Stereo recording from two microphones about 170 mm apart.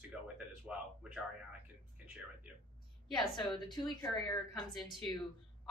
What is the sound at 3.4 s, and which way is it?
A woman's voice, 25° left (ahead or behind).